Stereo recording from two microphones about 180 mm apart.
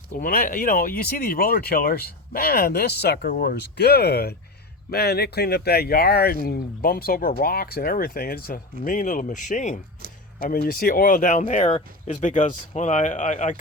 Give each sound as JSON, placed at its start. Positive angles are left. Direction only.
{"t": 0.1, "sound": "speech", "side_deg": 50}
{"t": 3.3, "sound": "speech", "side_deg": 55}
{"t": 10.0, "sound": "a sound", "side_deg": -55}
{"t": 10.5, "sound": "speech", "side_deg": 55}